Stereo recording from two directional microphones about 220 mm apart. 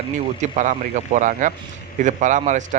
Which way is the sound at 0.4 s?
35° right (ahead or behind).